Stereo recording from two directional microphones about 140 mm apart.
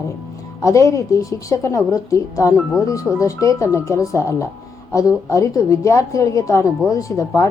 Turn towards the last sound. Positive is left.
turn(degrees=25)  # may be behind; listen again after turning